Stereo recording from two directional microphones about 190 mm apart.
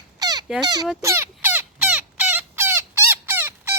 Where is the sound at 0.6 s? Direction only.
20° right (ahead or behind).